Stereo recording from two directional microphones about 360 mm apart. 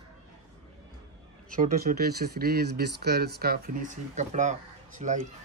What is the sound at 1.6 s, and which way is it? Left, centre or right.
Speech, right.